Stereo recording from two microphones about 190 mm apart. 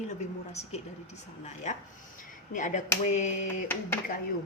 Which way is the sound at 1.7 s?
40° left (ahead or behind).